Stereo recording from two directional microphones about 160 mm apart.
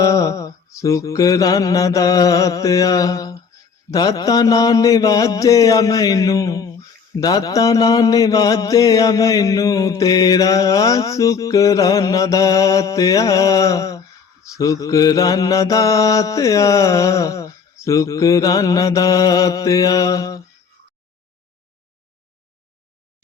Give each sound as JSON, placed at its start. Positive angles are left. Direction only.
{"t": 0.0, "sound": "mantra", "side_deg": 20}